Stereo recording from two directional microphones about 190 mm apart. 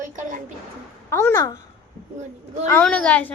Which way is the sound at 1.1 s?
15° left (ahead or behind).